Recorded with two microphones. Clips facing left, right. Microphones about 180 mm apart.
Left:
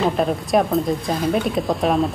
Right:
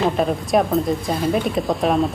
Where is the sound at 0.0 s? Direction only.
Centre (ahead or behind).